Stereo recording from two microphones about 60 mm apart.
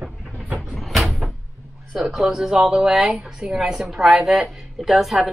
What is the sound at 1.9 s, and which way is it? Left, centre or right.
A woman's voice, centre.